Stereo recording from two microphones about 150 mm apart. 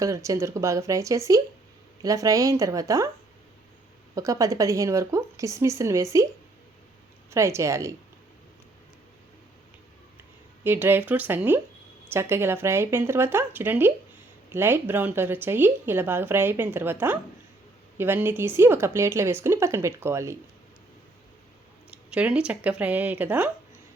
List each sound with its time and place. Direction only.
0.0 s speech: 20° right (ahead or behind)
4.1 s speech: 20° right (ahead or behind)
7.3 s speech: 20° right (ahead or behind)
10.6 s speech: 15° right (ahead or behind)
21.8 s speech: 10° right (ahead or behind)